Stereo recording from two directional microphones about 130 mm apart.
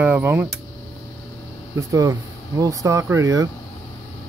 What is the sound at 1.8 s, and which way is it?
Speech, 25° right (ahead or behind).